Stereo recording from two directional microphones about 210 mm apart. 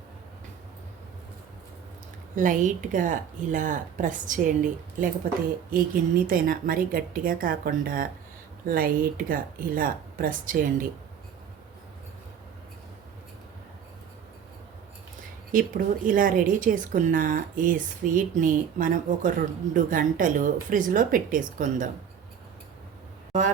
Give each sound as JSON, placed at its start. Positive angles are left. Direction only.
{"t": 2.3, "sound": "a woman's voice", "side_deg": -40}
{"t": 15.5, "sound": "a woman's voice", "side_deg": -40}